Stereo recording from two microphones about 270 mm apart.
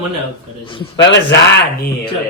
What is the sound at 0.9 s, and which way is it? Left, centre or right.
Speech, left.